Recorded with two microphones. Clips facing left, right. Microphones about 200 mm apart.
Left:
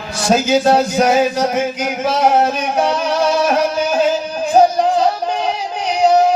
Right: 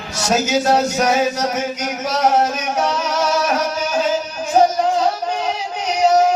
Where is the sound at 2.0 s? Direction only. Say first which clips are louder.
Left 3 dB; 30° left (ahead or behind).